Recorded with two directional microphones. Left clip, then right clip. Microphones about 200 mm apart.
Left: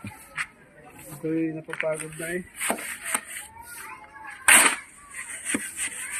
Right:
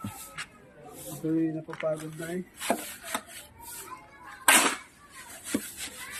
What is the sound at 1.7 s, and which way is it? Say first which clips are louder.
Speech: left 3 dB; 20° left (ahead or behind).